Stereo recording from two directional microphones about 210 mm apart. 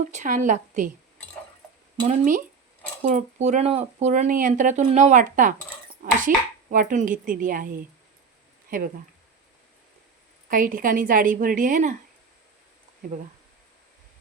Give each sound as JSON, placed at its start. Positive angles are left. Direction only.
{"t": 0.0, "sound": "speech", "side_deg": -35}
{"t": 2.0, "sound": "speech", "side_deg": -40}
{"t": 10.5, "sound": "speech", "side_deg": -40}